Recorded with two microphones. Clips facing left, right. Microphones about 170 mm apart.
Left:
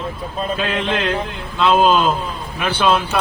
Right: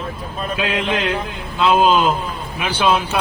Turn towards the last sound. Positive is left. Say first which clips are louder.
# left 1 dB
turn(degrees=-5)  # may be behind; listen again after turning